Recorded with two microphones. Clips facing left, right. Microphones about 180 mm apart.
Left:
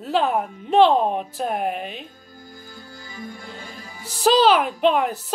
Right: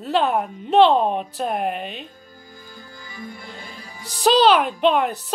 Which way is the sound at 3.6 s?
45° left (ahead or behind).